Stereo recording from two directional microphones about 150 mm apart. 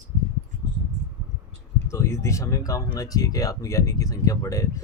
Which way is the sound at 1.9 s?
20° left (ahead or behind).